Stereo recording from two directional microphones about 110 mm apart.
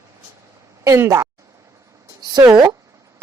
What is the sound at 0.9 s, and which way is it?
Speech, 25° right (ahead or behind).